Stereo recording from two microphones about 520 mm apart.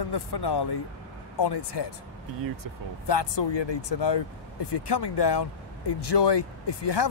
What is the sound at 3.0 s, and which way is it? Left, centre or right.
Speech, left.